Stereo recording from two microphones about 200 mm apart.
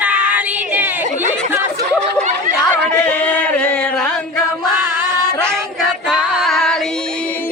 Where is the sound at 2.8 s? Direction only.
5° left (ahead or behind).